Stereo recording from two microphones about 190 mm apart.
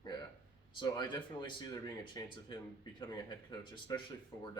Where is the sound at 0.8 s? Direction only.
25° left (ahead or behind).